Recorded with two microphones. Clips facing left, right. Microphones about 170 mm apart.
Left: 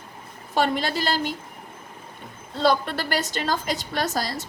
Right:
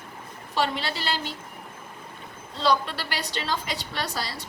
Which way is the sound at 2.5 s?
50° left (ahead or behind).